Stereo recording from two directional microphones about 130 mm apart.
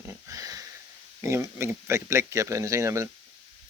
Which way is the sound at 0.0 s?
25° right (ahead or behind).